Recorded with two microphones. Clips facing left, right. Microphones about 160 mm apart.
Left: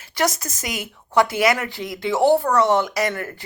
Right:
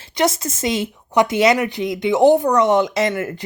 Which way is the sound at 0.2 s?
25° right (ahead or behind).